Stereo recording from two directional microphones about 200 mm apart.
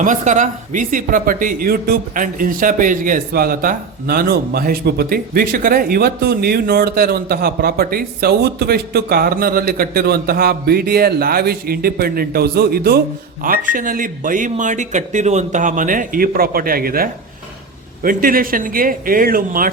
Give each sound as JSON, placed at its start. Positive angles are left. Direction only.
{"t": 0.0, "sound": "speech", "side_deg": -40}